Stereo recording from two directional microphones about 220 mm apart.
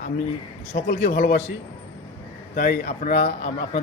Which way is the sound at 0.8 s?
40° left (ahead or behind).